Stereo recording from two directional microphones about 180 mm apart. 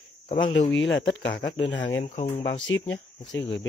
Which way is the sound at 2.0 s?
40° left (ahead or behind).